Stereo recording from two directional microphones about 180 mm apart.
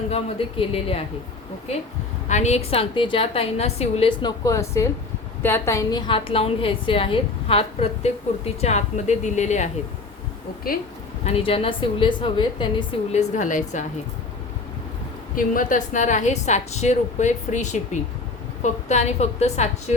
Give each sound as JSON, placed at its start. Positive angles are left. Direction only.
{"t": 0.1, "sound": "a woman's voice", "side_deg": 30}
{"t": 2.3, "sound": "a woman's voice", "side_deg": 40}
{"t": 10.7, "sound": "a woman's voice", "side_deg": 55}
{"t": 11.3, "sound": "a woman's voice", "side_deg": 30}
{"t": 13.1, "sound": "a woman's voice", "side_deg": 45}
{"t": 15.4, "sound": "a woman's voice", "side_deg": 45}